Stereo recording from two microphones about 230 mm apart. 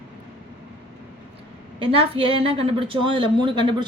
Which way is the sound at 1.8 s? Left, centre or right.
Right.